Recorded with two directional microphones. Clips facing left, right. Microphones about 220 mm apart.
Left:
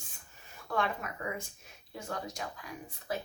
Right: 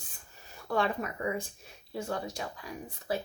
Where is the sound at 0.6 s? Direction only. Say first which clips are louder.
Right 4 dB; 30° right (ahead or behind).